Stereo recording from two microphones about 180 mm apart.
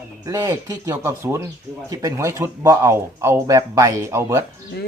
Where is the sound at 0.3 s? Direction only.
15° right (ahead or behind).